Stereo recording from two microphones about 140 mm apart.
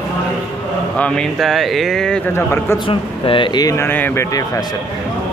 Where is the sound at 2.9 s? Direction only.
40° left (ahead or behind); by 4.3 s 15° left (ahead or behind).